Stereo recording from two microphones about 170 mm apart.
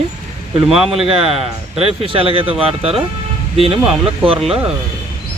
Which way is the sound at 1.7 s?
35° right (ahead or behind).